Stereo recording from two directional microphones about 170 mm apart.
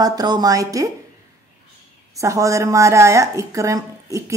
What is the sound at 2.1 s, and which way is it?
A woman's voice, 20° right (ahead or behind).